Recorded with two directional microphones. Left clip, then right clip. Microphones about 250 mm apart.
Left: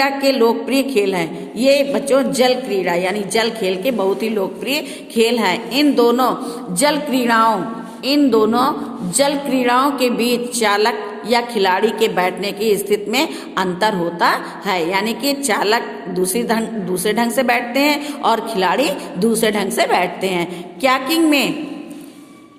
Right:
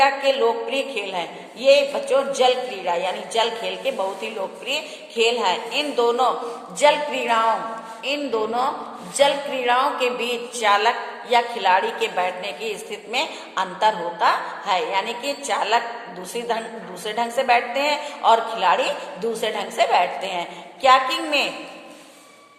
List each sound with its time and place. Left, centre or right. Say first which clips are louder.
0.0 s a woman's voice: left 3 dB; left